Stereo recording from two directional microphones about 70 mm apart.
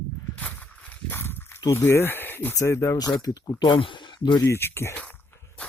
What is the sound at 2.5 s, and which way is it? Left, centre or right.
Speech, left.